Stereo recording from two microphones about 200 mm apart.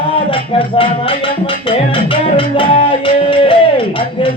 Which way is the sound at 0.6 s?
25° left (ahead or behind).